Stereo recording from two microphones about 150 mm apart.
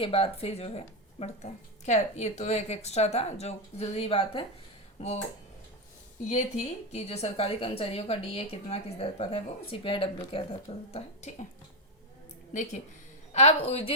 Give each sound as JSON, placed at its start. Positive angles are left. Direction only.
{"t": 0.0, "sound": "speech", "side_deg": 40}
{"t": 6.9, "sound": "a woman's voice", "side_deg": 45}
{"t": 12.5, "sound": "speech", "side_deg": 55}